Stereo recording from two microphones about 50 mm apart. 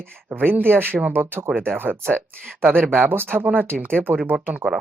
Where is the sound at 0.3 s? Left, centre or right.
Right.